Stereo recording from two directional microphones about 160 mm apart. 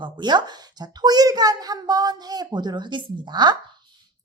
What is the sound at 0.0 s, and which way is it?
A child's voice, 30° right (ahead or behind).